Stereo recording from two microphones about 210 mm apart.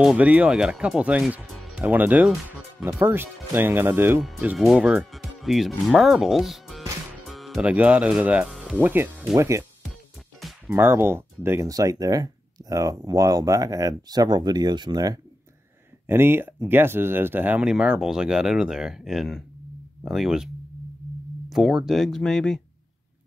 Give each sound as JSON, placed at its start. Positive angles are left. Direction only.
{"t": 0.0, "sound": "speech", "side_deg": -5}
{"t": 21.5, "sound": "speech", "side_deg": 0}